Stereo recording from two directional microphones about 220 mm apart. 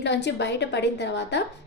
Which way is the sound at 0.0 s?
50° left (ahead or behind).